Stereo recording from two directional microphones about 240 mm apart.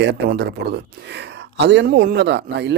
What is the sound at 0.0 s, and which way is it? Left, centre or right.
Speech, right.